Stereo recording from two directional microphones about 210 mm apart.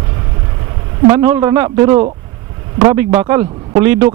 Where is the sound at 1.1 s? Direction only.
10° right (ahead or behind).